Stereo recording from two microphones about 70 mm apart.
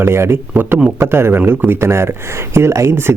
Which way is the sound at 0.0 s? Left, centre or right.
Right.